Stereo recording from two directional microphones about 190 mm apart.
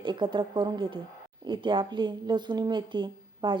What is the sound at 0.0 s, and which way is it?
Speech, 25° right (ahead or behind).